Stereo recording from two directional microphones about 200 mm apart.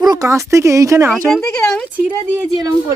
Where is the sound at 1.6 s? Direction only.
5° left (ahead or behind).